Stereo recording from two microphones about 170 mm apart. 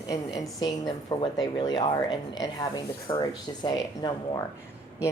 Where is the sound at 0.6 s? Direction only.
25° left (ahead or behind).